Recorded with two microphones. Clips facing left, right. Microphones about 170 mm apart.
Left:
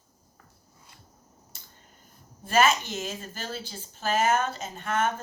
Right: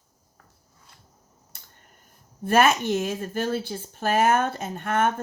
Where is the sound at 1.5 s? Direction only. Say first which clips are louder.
Right 2 dB; 60° right (ahead or behind).